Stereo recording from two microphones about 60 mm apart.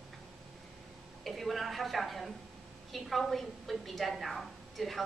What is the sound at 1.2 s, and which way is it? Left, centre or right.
A woman's voice, centre.